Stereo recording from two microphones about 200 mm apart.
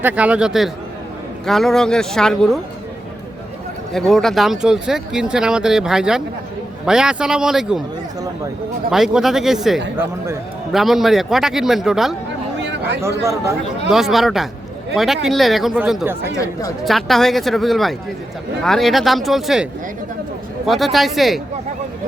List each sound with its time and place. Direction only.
0.0 s speech: 5° right (ahead or behind)
3.9 s speech: centre (ahead or behind)
8.9 s speech: centre (ahead or behind)
12.5 s a sound: 60° right (ahead or behind)
13.2 s speech: 15° right (ahead or behind)
13.9 s speech: centre (ahead or behind)
16.4 s speech: 15° left (ahead or behind)
16.8 s speech: centre (ahead or behind)
20.7 s speech: centre (ahead or behind)